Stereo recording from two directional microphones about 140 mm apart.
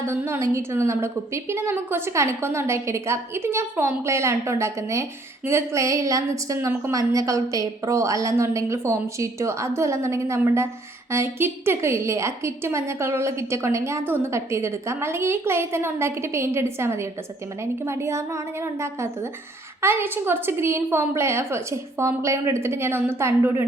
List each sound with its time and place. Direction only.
0.0 s a woman's voice: 20° right (ahead or behind)